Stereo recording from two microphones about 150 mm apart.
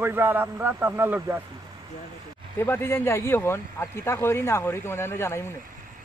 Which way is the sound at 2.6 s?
15° left (ahead or behind).